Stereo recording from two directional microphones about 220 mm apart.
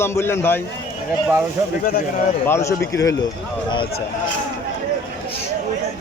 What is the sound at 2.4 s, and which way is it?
Speech, 10° left (ahead or behind).